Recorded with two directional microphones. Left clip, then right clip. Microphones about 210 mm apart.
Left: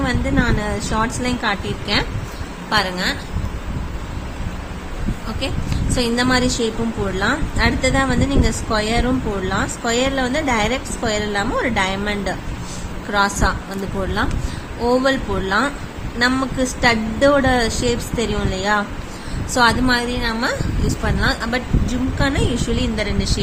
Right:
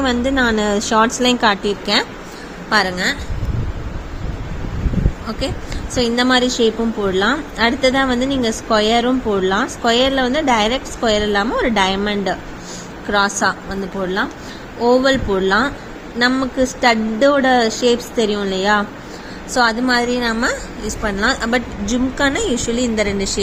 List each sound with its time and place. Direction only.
0.0 s a woman's voice: 30° right (ahead or behind)
6.0 s a woman's voice: 20° right (ahead or behind)
14.8 s a woman's voice: 15° right (ahead or behind)